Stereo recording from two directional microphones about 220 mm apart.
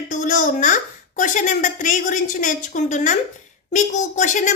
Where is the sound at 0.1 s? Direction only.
35° left (ahead or behind).